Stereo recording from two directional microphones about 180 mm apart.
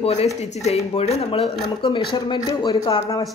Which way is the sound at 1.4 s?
Centre (ahead or behind).